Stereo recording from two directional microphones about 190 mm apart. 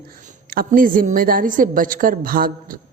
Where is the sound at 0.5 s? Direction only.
50° right (ahead or behind).